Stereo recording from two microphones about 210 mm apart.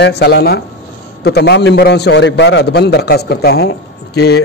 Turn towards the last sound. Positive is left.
turn(degrees=50)  # may be behind; listen again after turning